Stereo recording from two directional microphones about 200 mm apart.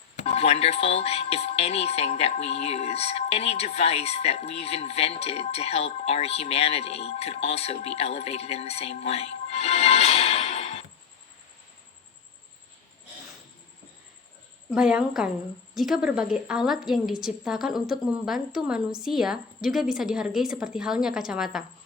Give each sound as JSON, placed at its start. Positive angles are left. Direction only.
{"t": 0.2, "sound": "speech", "side_deg": 30}
{"t": 14.7, "sound": "a woman's voice", "side_deg": -5}